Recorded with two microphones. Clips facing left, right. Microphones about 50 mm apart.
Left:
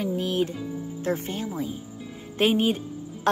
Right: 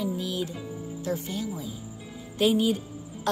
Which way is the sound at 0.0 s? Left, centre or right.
Left.